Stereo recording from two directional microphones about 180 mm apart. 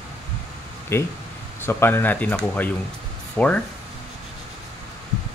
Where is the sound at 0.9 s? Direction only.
15° left (ahead or behind).